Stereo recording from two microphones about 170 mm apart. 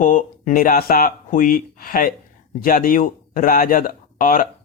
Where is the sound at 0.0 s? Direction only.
50° left (ahead or behind).